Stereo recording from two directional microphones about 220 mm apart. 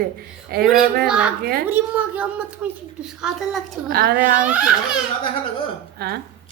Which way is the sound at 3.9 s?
45° right (ahead or behind).